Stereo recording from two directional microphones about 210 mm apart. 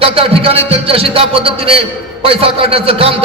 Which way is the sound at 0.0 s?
25° right (ahead or behind).